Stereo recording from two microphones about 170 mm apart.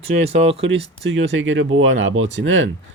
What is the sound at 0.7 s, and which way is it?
Speech, 90° right.